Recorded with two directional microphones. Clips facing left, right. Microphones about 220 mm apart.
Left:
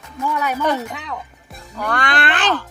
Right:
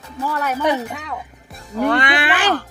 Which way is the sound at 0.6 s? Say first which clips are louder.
Right 1 dB; 10° right (ahead or behind).